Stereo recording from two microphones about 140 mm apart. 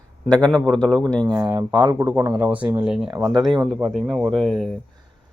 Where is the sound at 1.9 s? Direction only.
15° right (ahead or behind); by 4.7 s centre (ahead or behind).